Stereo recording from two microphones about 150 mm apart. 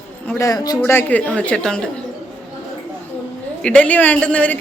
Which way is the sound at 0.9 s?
15° left (ahead or behind).